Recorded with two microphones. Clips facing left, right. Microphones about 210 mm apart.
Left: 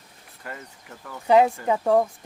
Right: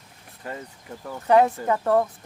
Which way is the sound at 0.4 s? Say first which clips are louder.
Right 4 dB; 25° right (ahead or behind).